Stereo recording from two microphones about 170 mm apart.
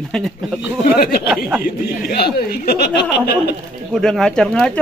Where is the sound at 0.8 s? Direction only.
60° left (ahead or behind).